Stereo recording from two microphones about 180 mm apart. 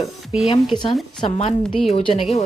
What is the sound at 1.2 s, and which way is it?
Speech, 30° left (ahead or behind).